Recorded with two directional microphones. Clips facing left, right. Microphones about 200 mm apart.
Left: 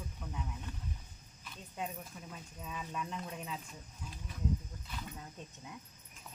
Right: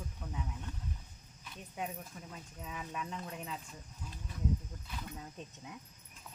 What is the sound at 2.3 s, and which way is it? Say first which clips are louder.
Speech: left 1 dB; 5° right (ahead or behind).